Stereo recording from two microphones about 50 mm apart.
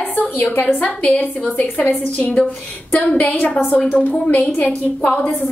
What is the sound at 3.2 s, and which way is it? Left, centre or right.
Speech, left.